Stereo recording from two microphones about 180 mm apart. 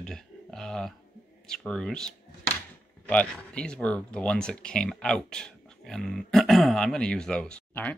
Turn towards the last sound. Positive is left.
turn(degrees=5)  # may be behind; listen again after turning